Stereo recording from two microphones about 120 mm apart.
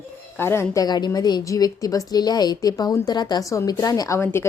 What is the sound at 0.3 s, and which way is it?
A woman's voice, 20° left (ahead or behind).